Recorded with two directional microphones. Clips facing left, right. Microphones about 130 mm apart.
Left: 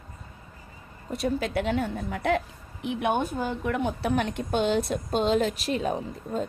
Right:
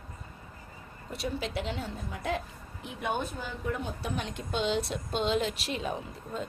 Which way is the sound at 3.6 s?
70° left (ahead or behind).